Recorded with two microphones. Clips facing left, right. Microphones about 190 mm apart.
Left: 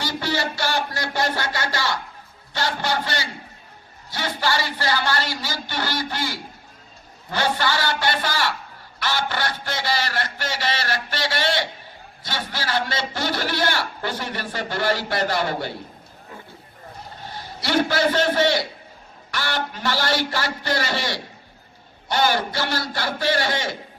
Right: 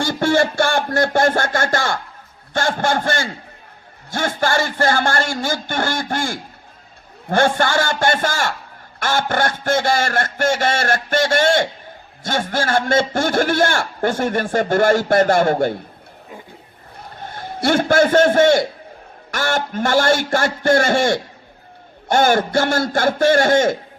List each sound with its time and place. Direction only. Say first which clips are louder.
0.0 s a man's voice: right 9 dB; 50° right (ahead or behind)
17.3 s a man's voice: right 4 dB; 50° right (ahead or behind)